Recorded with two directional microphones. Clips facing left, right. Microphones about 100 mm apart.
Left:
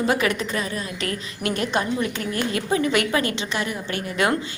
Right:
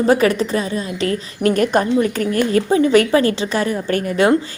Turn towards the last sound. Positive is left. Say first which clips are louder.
# right 9 dB
turn(degrees=-45)  # may be behind; listen again after turning